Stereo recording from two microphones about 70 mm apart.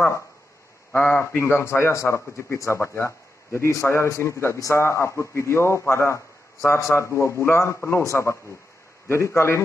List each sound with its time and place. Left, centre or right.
0.9 s a man's voice: left